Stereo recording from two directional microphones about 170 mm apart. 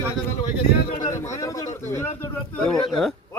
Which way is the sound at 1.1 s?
20° left (ahead or behind).